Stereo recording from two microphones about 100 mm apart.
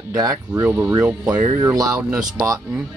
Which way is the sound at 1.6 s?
35° right (ahead or behind).